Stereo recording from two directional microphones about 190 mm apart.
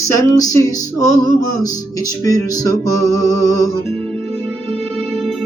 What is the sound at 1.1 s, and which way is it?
Music, 90° right.